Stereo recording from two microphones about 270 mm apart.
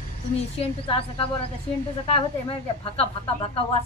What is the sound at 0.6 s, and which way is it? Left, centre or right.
A woman's voice, centre.